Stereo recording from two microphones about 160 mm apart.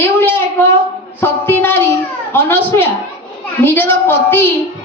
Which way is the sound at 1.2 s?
15° left (ahead or behind).